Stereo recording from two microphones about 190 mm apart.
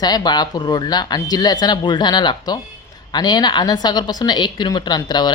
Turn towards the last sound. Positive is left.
turn(degrees=20)  # may be behind; listen again after turning